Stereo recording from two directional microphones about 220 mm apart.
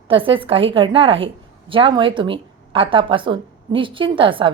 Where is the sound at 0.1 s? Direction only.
25° right (ahead or behind).